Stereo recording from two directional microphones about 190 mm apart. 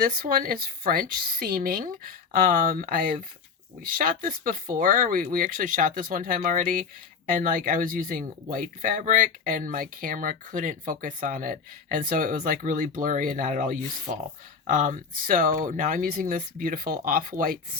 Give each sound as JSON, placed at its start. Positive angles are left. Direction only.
{"t": 0.0, "sound": "speech", "side_deg": -50}